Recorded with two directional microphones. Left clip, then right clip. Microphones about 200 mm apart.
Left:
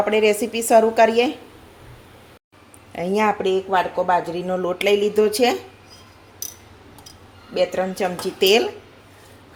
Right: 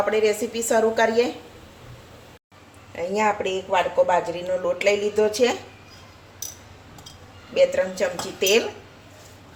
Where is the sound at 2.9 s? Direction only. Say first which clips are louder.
Left 2 dB; 45° left (ahead or behind).